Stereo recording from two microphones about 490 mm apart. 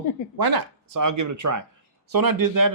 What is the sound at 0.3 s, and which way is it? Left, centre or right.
Speech, right.